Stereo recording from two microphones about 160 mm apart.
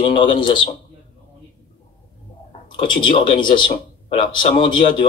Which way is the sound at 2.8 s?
30° left (ahead or behind).